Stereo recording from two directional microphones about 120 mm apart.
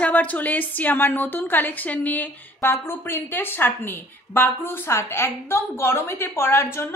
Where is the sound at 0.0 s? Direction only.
10° left (ahead or behind).